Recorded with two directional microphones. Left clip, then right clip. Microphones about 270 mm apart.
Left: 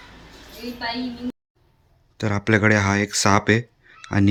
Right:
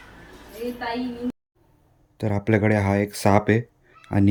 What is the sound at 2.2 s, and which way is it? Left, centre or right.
Speech, centre.